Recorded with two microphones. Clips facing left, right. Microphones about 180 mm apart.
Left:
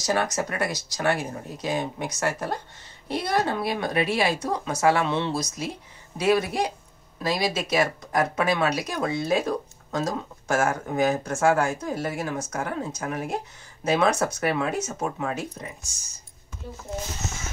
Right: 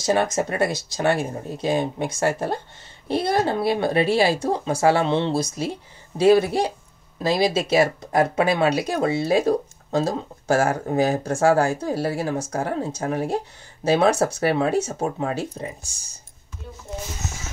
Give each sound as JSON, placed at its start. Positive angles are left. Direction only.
{"t": 0.0, "sound": "a woman's voice", "side_deg": -25}